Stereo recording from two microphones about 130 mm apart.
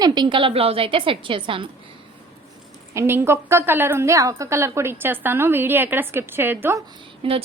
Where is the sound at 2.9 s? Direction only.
20° right (ahead or behind).